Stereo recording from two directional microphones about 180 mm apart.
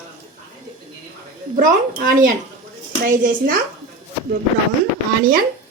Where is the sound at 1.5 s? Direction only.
50° right (ahead or behind).